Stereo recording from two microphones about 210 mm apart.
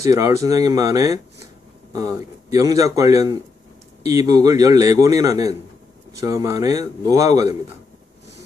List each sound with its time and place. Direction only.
0.0 s a man's voice: 15° right (ahead or behind)